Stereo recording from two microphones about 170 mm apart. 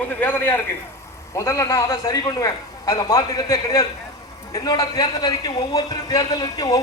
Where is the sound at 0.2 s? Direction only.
10° left (ahead or behind).